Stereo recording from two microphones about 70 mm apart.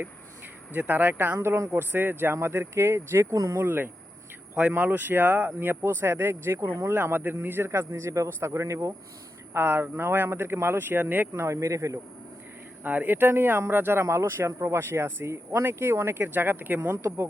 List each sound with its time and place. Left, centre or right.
0.7 s speech: right
3.3 s speech: right
3.6 s speech: right
9.5 s speech: right
11.4 s speech: right
12.8 s speech: right
16.9 s speech: right